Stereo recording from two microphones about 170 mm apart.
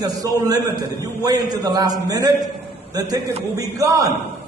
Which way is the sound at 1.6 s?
20° right (ahead or behind).